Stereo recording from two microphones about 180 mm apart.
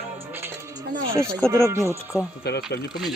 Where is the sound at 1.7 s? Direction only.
15° right (ahead or behind).